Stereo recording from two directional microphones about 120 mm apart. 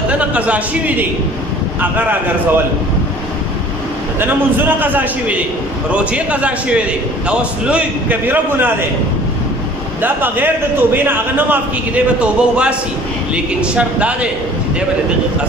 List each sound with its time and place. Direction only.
0.1 s a man's voice: 10° right (ahead or behind)
4.2 s a man's voice: 15° right (ahead or behind)
10.0 s a man's voice: 15° right (ahead or behind)